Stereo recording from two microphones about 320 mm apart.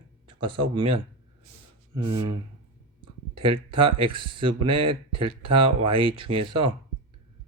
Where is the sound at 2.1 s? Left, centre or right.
Centre.